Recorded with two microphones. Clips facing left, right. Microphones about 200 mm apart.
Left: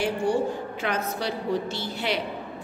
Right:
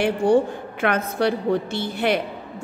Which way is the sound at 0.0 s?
60° right (ahead or behind).